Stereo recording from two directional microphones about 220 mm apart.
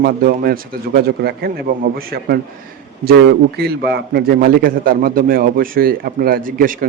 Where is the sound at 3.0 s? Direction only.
45° right (ahead or behind).